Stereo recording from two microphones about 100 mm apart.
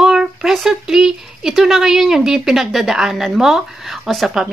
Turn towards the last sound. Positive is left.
turn(degrees=-5)  # may be behind; listen again after turning